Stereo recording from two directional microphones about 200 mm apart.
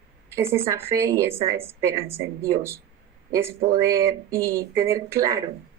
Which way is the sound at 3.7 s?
15° right (ahead or behind).